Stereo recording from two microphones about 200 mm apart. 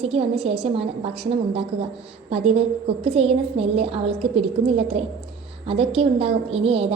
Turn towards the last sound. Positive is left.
turn(degrees=-30)  # may be behind; listen again after turning